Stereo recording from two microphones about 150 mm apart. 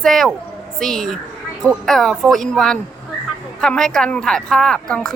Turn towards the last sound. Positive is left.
turn(degrees=5)  # may be behind; listen again after turning